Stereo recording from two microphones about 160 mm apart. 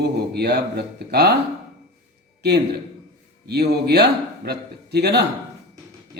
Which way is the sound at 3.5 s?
90° right.